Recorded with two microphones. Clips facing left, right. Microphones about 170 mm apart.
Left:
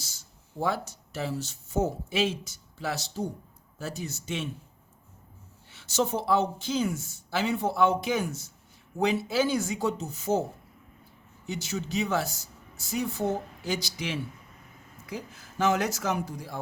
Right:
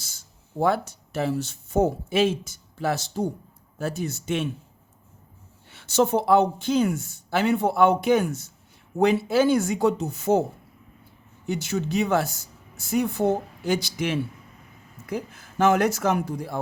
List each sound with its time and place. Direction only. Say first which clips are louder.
0.6 s speech: right 7 dB; 60° right (ahead or behind)
5.7 s speech: right 7 dB; 60° right (ahead or behind)
11.4 s speech: right 7 dB; 55° right (ahead or behind)